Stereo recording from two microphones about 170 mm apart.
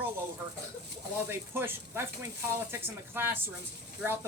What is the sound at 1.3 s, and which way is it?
Speech, 15° right (ahead or behind).